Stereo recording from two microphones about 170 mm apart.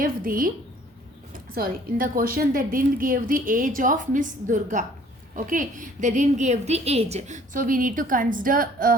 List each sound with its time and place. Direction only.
0.0 s a woman's voice: 55° right (ahead or behind)